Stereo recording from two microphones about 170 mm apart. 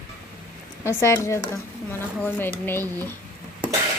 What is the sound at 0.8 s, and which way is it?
Speech, 15° left (ahead or behind).